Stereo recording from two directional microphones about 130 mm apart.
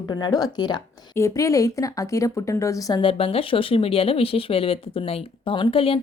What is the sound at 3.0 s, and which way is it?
Speech, 45° left (ahead or behind).